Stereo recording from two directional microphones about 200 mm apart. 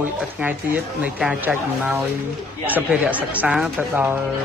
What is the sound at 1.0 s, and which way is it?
Speech, 5° right (ahead or behind).